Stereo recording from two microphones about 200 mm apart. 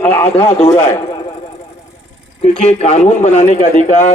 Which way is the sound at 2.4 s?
35° left (ahead or behind).